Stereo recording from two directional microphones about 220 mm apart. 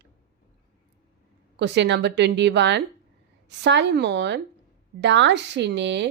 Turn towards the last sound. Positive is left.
turn(degrees=-55)  # may be behind; listen again after turning